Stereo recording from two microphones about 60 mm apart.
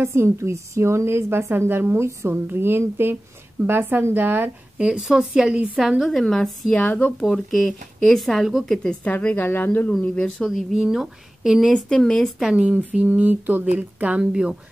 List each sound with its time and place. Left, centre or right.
0.0 s a woman's voice: right
4.7 s a woman's voice: centre
6.2 s speech: centre
6.7 s speech: left
7.2 s speech: centre
9.0 s speech: left
10.2 s speech: centre
10.7 s a woman's voice: centre
11.9 s speech: centre
12.5 s speech: centre
14.2 s a woman's voice: centre